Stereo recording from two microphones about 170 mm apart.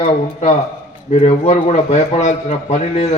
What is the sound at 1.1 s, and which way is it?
A man's voice, 40° left (ahead or behind).